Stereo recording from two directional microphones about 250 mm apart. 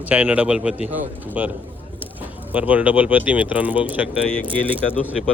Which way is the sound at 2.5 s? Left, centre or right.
Centre.